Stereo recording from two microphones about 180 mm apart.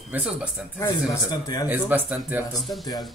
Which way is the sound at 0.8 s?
20° left (ahead or behind).